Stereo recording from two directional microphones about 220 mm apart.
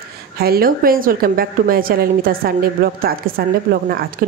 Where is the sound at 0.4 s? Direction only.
45° right (ahead or behind).